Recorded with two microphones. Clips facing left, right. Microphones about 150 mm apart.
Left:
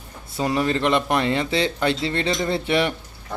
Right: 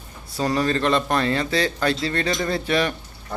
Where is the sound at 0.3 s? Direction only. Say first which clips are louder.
Even; 20° left (ahead or behind).